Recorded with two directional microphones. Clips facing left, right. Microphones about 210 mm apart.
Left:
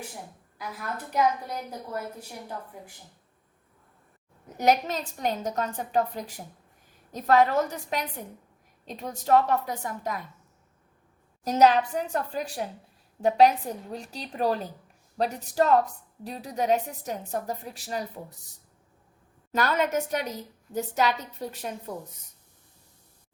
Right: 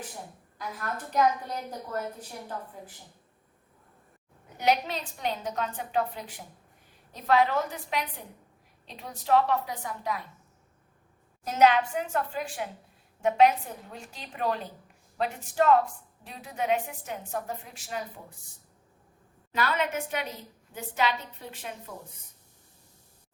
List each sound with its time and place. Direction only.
0.6 s a woman's voice: 10° left (ahead or behind)
4.5 s a woman's voice: 45° left (ahead or behind)
11.4 s a woman's voice: 35° left (ahead or behind)
19.5 s a woman's voice: 45° left (ahead or behind)